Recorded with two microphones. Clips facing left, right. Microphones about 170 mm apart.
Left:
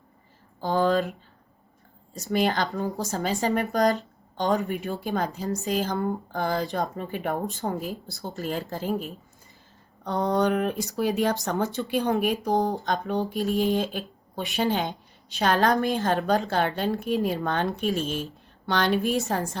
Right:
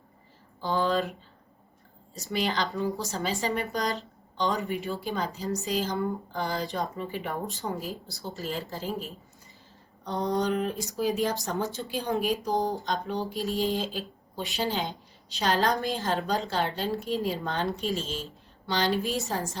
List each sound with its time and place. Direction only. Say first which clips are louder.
0.6 s speech: left 4 dB; 45° left (ahead or behind)
2.3 s a woman's voice: left 4 dB; 50° left (ahead or behind)